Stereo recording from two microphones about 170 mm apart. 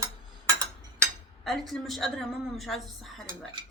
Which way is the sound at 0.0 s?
20° right (ahead or behind).